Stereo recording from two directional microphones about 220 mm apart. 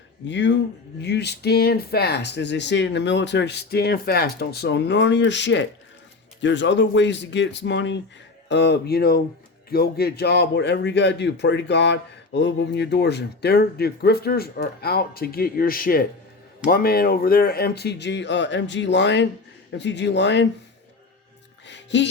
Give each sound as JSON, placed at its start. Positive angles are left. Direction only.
{"t": 0.3, "sound": "speech", "side_deg": 55}
{"t": 21.7, "sound": "music", "side_deg": 55}